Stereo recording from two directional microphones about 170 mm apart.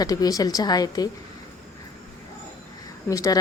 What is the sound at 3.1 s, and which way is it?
Speech, 20° left (ahead or behind).